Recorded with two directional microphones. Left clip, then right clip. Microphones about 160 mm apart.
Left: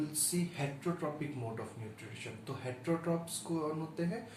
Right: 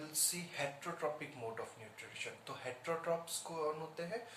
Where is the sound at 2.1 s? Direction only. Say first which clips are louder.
Even; 10° right (ahead or behind).